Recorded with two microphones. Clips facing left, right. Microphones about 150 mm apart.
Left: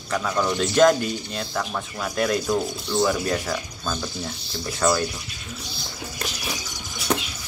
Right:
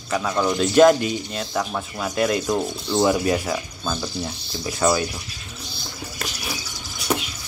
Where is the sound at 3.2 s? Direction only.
10° right (ahead or behind).